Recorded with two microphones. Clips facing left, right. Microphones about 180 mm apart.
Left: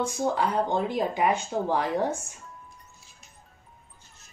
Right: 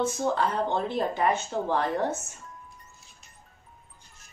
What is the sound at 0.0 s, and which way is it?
A woman's voice, 15° left (ahead or behind).